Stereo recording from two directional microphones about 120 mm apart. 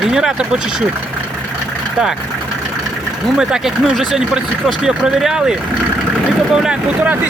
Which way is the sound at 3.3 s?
5° right (ahead or behind).